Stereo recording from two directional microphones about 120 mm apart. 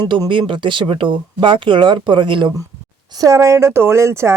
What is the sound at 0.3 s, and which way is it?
Speech, 45° right (ahead or behind).